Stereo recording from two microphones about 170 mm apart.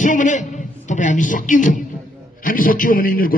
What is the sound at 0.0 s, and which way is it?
A man's voice, 50° left (ahead or behind).